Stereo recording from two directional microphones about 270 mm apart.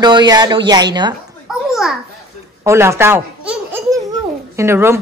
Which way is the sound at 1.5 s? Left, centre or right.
Centre.